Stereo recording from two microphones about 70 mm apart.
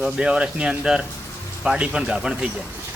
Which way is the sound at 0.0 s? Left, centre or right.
Centre.